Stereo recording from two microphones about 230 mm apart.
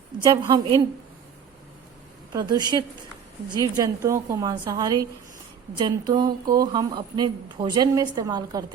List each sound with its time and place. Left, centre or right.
0.3 s speech: centre
2.3 s speech: centre